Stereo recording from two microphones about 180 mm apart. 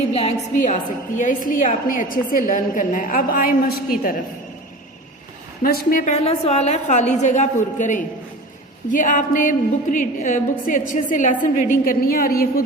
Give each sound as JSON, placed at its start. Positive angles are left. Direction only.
{"t": 0.1, "sound": "a woman's voice", "side_deg": 35}
{"t": 5.6, "sound": "a woman's voice", "side_deg": 55}
{"t": 6.1, "sound": "a woman's voice", "side_deg": 35}